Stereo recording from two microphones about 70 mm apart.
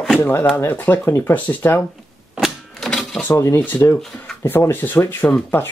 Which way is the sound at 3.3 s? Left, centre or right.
Left.